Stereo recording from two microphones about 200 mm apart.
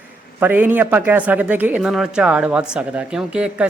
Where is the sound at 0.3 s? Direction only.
10° right (ahead or behind).